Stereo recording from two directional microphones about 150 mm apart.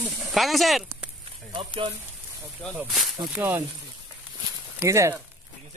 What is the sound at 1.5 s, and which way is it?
Speech, 35° right (ahead or behind).